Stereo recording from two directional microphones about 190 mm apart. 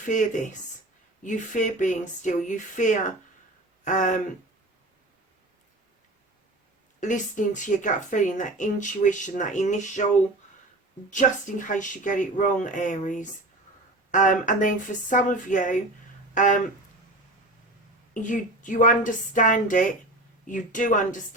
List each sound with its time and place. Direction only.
0.1 s speech: 40° left (ahead or behind)
7.0 s speech: 40° left (ahead or behind)
11.1 s a woman's voice: 40° left (ahead or behind)
18.1 s a woman's voice: 40° left (ahead or behind)